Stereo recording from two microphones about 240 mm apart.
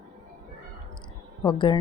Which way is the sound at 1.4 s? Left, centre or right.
Centre.